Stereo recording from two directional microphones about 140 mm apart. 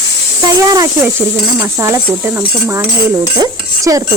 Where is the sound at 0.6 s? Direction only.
25° right (ahead or behind).